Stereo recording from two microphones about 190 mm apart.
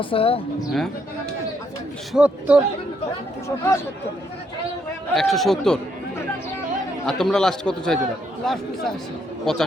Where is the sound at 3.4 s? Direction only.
15° left (ahead or behind).